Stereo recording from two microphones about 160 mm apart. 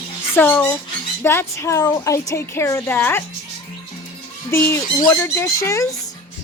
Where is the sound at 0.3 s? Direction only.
15° left (ahead or behind).